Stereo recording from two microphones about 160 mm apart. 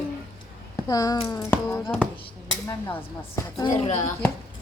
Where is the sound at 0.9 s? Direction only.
20° left (ahead or behind).